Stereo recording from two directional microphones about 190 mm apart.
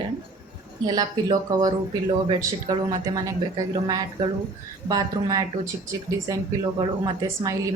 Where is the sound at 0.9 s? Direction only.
25° right (ahead or behind).